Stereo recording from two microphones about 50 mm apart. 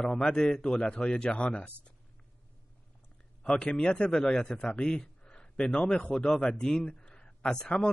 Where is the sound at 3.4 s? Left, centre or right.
Left.